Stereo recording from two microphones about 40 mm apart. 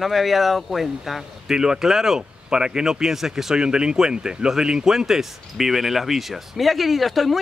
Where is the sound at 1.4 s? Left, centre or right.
Centre.